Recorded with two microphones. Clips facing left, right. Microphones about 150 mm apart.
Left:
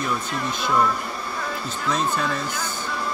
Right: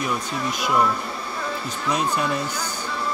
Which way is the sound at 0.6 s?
10° right (ahead or behind).